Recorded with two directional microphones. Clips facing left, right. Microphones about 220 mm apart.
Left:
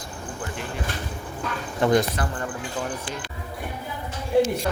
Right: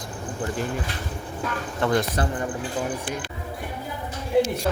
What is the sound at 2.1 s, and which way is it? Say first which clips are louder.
Speech: right 3 dB; 20° right (ahead or behind).